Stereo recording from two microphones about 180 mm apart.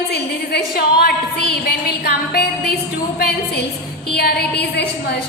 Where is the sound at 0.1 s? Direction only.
60° left (ahead or behind).